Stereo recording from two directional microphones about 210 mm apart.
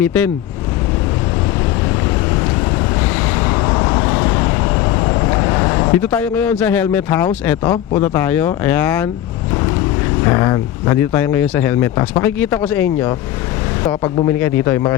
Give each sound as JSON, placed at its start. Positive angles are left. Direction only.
{"t": 0.0, "sound": "speech", "side_deg": 5}
{"t": 2.0, "sound": "vehicle", "side_deg": 15}
{"t": 7.4, "sound": "speech", "side_deg": 10}
{"t": 10.2, "sound": "speech", "side_deg": 15}
{"t": 13.8, "sound": "speech", "side_deg": 25}
{"t": 14.3, "sound": "speech", "side_deg": 10}